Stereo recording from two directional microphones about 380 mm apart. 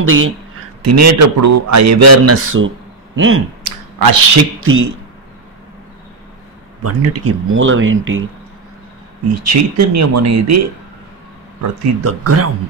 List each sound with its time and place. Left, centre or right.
0.0 s speech: right
0.8 s a man's voice: right
3.6 s a sound: right
4.4 s speech: right
6.8 s speech: right
9.5 s a man's voice: right
12.0 s speech: right